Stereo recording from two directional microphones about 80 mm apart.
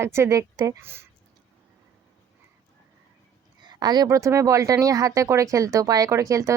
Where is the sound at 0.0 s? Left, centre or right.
Right.